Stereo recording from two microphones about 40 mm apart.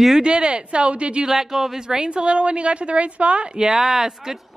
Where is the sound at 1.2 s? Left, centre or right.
Centre.